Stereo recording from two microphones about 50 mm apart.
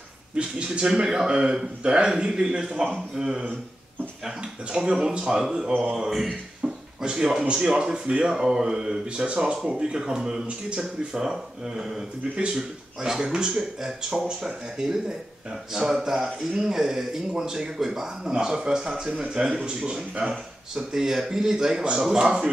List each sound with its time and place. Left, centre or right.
0.4 s a man's voice: centre
4.7 s a man's voice: centre
8.4 s a man's voice: centre